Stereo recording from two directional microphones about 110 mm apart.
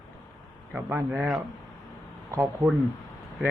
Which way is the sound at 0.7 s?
20° right (ahead or behind).